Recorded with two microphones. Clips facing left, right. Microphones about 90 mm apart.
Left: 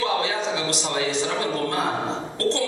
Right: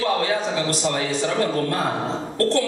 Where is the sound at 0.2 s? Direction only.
45° right (ahead or behind).